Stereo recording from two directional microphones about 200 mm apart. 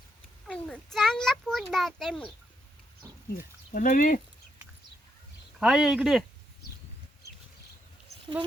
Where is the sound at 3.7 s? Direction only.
40° left (ahead or behind).